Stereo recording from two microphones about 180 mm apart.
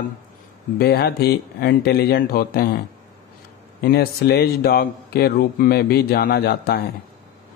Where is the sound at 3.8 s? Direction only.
60° left (ahead or behind).